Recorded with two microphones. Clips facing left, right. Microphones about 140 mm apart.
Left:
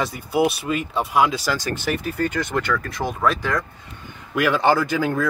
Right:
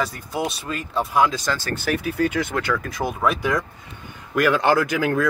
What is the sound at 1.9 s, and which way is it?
Speech, 5° right (ahead or behind).